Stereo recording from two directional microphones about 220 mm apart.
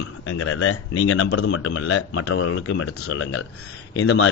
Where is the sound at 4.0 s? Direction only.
65° left (ahead or behind).